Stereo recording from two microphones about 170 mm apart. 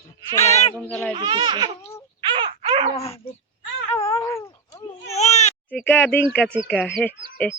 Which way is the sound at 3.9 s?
35° left (ahead or behind).